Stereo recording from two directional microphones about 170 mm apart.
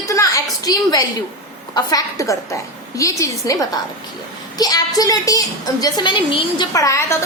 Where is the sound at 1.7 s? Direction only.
20° left (ahead or behind).